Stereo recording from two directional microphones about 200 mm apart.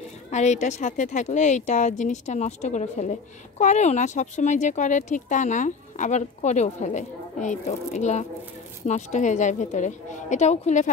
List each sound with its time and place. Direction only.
0.3 s speech: 35° left (ahead or behind)